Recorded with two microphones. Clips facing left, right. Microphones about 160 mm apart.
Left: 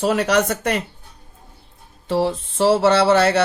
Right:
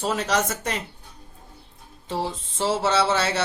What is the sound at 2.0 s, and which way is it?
Speech, 65° left (ahead or behind).